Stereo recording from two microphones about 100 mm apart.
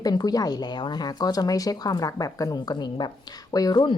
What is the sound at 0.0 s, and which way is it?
Speech, 40° left (ahead or behind).